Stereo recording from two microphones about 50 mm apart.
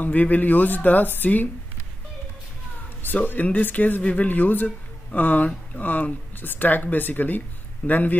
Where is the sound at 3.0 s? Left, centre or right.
Left.